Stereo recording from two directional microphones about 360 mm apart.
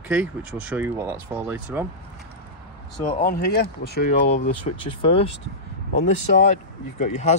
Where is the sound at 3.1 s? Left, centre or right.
Centre.